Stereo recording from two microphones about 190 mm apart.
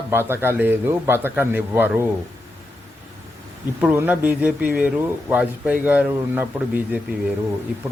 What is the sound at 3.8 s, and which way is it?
Speech, 10° right (ahead or behind).